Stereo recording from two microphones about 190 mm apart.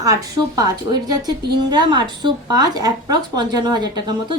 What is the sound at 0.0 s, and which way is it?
Speech, 20° right (ahead or behind).